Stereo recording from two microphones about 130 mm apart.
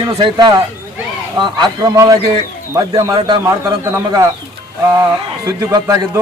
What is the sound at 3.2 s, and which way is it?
Speech, 35° right (ahead or behind).